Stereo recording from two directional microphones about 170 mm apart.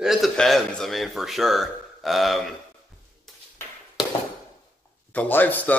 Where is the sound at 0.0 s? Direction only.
Centre (ahead or behind).